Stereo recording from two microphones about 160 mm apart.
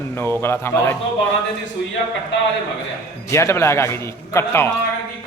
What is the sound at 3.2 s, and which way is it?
A man's voice, 15° left (ahead or behind).